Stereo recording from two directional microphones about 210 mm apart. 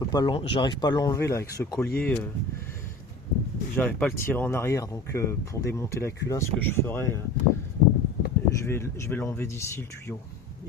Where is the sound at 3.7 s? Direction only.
10° left (ahead or behind).